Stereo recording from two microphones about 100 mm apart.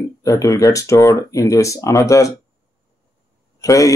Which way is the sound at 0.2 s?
35° left (ahead or behind).